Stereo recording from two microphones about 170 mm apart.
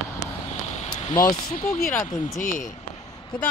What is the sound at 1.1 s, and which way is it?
Speech, 20° left (ahead or behind).